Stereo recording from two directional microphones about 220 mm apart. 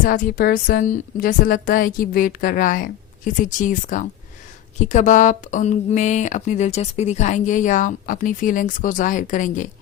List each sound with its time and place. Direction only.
0.0 s speech: 40° left (ahead or behind)